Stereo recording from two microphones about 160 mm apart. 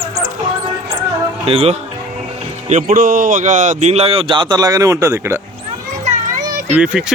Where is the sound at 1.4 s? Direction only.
40° right (ahead or behind).